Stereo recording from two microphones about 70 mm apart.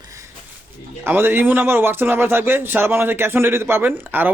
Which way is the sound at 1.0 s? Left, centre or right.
Right.